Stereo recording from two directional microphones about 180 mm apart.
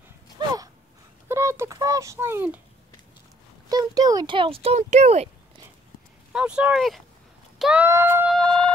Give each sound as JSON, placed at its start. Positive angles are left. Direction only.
{"t": 1.3, "sound": "a sound", "side_deg": -15}
{"t": 3.6, "sound": "speech", "side_deg": -20}
{"t": 6.3, "sound": "speech", "side_deg": -5}
{"t": 8.3, "sound": "music", "side_deg": 5}